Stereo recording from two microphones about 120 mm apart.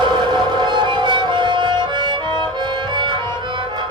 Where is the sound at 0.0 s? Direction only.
40° right (ahead or behind).